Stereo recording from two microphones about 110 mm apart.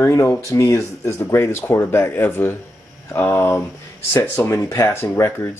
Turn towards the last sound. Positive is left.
turn(degrees=25)  # may be behind; listen again after turning